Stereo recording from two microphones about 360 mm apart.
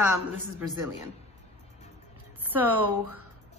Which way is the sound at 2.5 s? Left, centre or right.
Centre.